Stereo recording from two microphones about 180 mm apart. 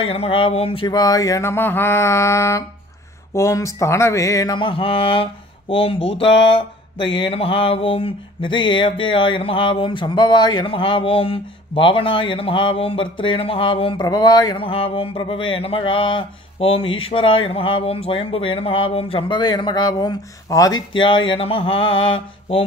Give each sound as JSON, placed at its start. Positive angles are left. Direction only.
{"t": 0.0, "sound": "speech", "side_deg": 30}
{"t": 21.3, "sound": "speech", "side_deg": 30}